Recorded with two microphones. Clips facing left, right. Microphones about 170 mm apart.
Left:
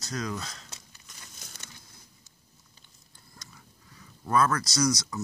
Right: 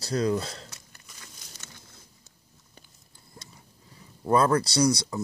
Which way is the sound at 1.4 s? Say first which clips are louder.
Left 2 dB; 50° left (ahead or behind).